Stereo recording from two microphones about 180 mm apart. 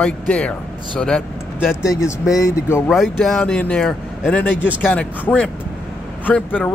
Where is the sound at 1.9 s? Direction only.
15° left (ahead or behind).